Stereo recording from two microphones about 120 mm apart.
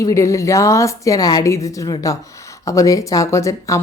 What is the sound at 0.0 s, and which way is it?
Speech, 25° left (ahead or behind).